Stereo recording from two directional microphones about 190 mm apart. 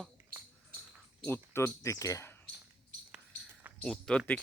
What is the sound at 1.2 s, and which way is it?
Speech, 10° left (ahead or behind).